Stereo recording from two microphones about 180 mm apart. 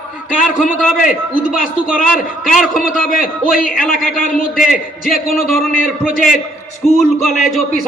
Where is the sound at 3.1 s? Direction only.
50° left (ahead or behind).